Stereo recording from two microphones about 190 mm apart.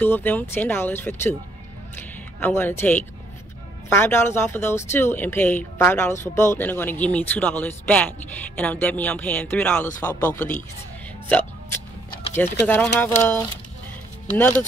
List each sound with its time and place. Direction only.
0.0 s speech: 10° left (ahead or behind)
2.4 s speech: 10° left (ahead or behind)